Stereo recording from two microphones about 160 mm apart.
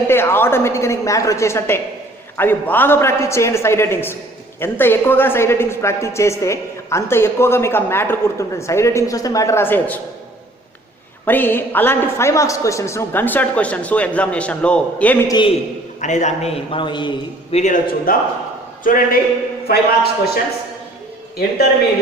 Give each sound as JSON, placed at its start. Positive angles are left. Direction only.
{"t": 0.1, "sound": "a woman's voice", "side_deg": 15}
{"t": 11.3, "sound": "a woman's voice", "side_deg": 10}
{"t": 15.3, "sound": "a man's voice", "side_deg": 30}
{"t": 16.0, "sound": "a man's voice", "side_deg": 50}
{"t": 17.6, "sound": "a man's voice", "side_deg": 55}
{"t": 19.6, "sound": "a man's voice", "side_deg": 75}